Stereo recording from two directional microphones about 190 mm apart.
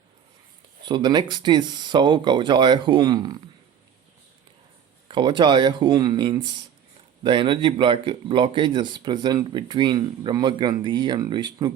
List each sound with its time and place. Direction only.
0.9 s speech: 25° right (ahead or behind)
5.0 s speech: 25° right (ahead or behind)